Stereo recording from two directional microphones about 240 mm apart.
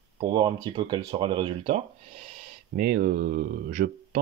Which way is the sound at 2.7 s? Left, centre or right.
Right.